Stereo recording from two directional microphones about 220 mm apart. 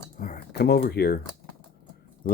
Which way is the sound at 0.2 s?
45° left (ahead or behind).